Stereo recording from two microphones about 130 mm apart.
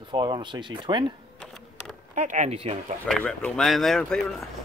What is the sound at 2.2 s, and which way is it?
Speech, 65° right (ahead or behind).